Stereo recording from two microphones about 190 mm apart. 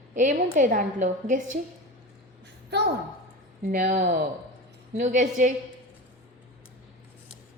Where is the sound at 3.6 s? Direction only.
40° right (ahead or behind).